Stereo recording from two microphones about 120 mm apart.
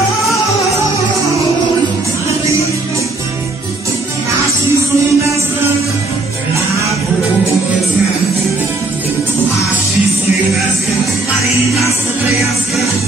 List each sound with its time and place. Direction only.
4.7 s music: 25° right (ahead or behind)